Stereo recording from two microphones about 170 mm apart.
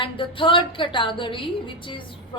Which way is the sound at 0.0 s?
30° left (ahead or behind).